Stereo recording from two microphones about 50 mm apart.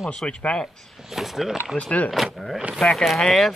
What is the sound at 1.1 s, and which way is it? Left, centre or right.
Speech, centre.